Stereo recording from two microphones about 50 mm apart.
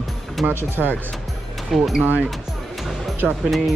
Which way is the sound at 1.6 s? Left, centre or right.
Centre.